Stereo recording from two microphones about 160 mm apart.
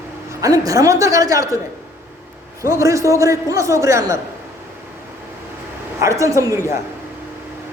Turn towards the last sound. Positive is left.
turn(degrees=-20)  # may be behind; listen again after turning